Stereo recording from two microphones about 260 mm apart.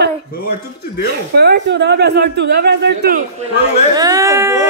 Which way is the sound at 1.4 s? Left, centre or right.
Right.